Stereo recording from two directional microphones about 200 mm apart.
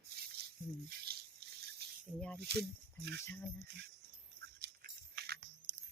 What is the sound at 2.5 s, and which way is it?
Speech, 55° right (ahead or behind).